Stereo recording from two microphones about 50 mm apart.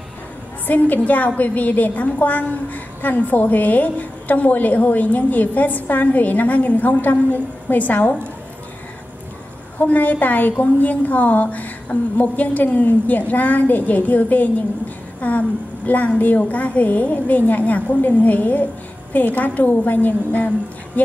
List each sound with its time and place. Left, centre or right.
0.7 s a woman's voice: left
9.8 s a woman's voice: left